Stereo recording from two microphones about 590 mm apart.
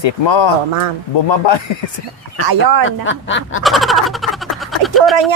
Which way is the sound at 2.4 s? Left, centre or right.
Right.